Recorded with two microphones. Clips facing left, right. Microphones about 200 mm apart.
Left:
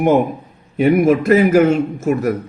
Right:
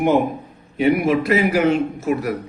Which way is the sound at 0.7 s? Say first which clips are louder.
Left 4 dB; 50° left (ahead or behind).